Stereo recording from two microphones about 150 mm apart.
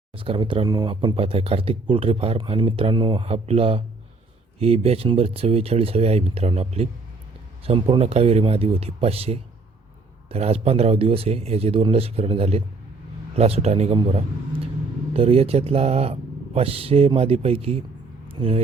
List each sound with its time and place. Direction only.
0.2 s a man's voice: 35° right (ahead or behind)
15.1 s speech: 40° right (ahead or behind)
18.3 s vehicle: 40° right (ahead or behind)